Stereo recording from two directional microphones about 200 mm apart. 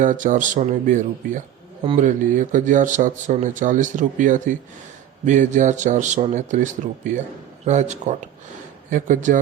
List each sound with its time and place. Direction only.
0.0 s speech: 40° right (ahead or behind)
1.8 s speech: 25° right (ahead or behind)
2.0 s speech: 40° right (ahead or behind)